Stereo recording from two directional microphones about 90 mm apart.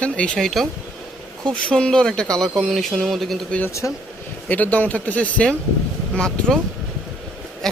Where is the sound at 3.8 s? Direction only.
30° left (ahead or behind).